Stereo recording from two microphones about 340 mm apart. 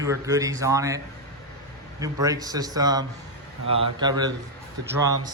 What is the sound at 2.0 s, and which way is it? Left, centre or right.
A man's voice, centre.